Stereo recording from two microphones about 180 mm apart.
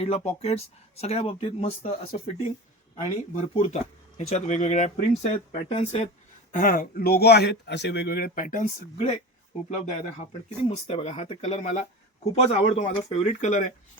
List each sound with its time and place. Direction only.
0.0 s speech: 35° left (ahead or behind)
3.3 s speech: 35° left (ahead or behind)